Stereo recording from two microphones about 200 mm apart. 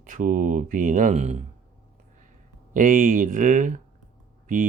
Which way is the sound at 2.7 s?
40° right (ahead or behind).